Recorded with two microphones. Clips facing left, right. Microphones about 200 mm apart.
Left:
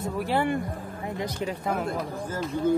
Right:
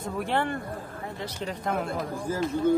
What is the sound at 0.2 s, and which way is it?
Speech, 10° left (ahead or behind).